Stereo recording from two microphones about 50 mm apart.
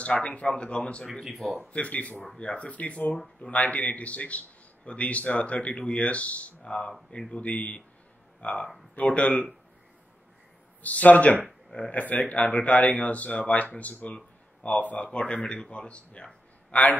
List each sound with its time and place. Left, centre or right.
0.0 s a man's voice: left
1.2 s speech: centre
1.7 s a man's voice: left
10.8 s a man's voice: left
12.0 s a man's voice: left
14.1 s a sound: left
15.0 s a man's voice: centre